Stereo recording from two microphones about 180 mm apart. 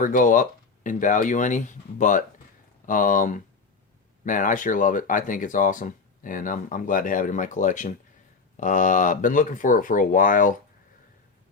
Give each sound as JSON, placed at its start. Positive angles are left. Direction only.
{"t": 0.0, "sound": "speech", "side_deg": 50}